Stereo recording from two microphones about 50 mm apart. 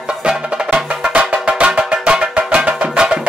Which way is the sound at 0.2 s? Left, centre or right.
Right.